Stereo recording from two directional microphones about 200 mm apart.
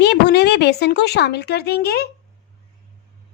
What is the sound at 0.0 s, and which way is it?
A woman's voice, 55° left (ahead or behind).